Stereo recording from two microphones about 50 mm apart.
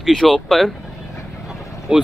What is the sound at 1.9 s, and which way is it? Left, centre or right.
Speech, centre.